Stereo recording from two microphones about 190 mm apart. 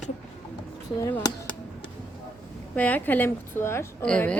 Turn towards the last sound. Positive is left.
turn(degrees=5)  # may be behind; listen again after turning